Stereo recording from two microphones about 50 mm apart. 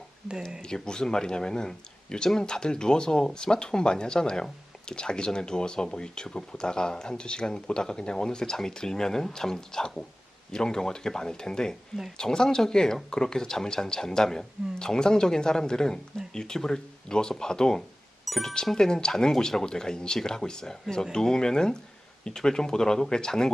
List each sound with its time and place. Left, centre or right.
0.6 s speech: centre
18.3 s speech: centre